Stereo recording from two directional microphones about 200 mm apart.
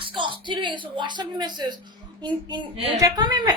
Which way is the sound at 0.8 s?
25° right (ahead or behind).